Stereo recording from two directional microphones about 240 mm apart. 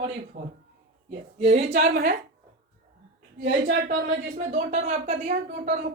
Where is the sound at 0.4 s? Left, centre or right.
Right.